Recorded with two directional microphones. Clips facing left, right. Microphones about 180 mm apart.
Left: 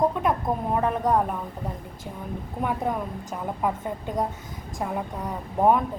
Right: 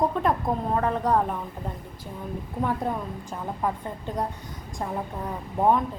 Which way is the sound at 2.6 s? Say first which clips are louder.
Left 1 dB; 15° left (ahead or behind).